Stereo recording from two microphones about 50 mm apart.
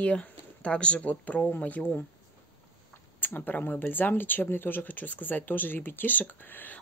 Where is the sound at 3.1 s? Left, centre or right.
Left.